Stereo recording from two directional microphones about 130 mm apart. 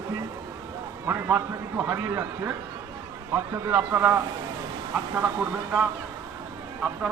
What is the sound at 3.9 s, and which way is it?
Speech, 20° right (ahead or behind).